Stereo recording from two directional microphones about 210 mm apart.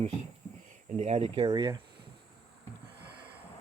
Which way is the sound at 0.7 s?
30° right (ahead or behind).